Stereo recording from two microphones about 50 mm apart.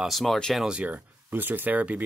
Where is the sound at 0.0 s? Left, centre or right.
Centre.